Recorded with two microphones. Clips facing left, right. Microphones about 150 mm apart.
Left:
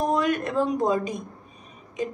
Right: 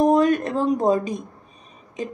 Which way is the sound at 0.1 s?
40° right (ahead or behind).